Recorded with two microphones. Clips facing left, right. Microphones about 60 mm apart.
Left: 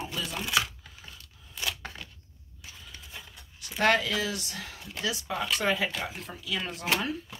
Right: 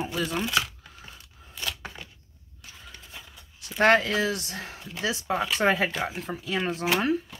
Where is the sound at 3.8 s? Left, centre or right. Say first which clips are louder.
Right 4 dB; right.